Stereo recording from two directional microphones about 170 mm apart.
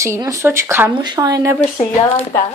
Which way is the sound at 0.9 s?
25° right (ahead or behind).